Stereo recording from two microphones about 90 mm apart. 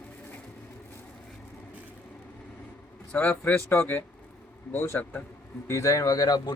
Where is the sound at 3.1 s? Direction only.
20° left (ahead or behind).